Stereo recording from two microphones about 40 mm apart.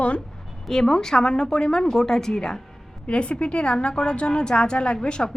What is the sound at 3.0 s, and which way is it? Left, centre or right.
A woman's voice, left.